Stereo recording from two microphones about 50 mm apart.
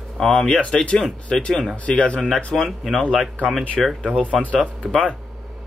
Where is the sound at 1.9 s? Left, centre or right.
Left.